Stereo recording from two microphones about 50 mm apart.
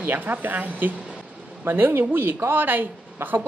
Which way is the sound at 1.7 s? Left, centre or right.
Right.